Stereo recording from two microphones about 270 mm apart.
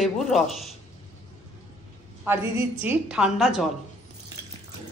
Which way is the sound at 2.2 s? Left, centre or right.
Centre.